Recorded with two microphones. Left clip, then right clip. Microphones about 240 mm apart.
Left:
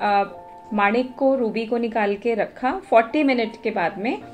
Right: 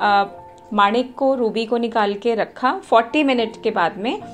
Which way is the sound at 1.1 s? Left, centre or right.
Right.